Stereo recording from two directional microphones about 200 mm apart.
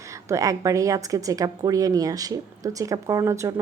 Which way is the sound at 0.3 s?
15° right (ahead or behind).